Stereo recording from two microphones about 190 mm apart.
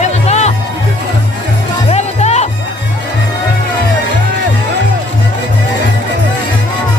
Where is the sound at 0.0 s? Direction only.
35° left (ahead or behind).